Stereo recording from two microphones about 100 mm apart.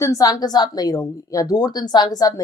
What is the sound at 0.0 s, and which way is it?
Speech, 35° left (ahead or behind).